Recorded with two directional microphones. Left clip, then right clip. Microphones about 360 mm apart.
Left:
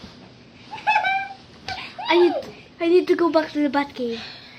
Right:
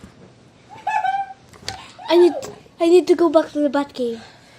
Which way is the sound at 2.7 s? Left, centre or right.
Centre.